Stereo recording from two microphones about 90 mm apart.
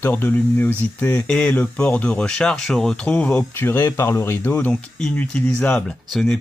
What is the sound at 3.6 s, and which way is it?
Speech, 25° left (ahead or behind).